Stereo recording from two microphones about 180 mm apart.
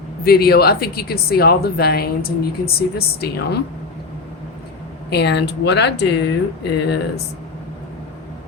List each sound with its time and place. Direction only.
0.3 s speech: 60° left (ahead or behind)
5.1 s speech: 70° left (ahead or behind)